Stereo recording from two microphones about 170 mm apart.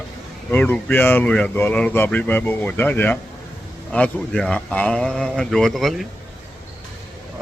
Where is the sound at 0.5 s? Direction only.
10° left (ahead or behind).